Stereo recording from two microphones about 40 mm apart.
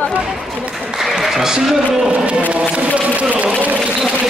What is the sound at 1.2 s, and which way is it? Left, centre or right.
Applause, centre.